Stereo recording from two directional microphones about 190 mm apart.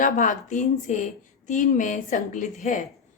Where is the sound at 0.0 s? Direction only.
45° left (ahead or behind).